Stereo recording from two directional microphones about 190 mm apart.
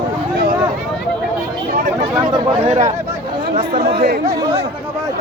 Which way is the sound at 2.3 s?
30° right (ahead or behind).